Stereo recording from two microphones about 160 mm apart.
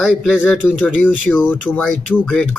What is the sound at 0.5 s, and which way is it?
Speech, 5° right (ahead or behind).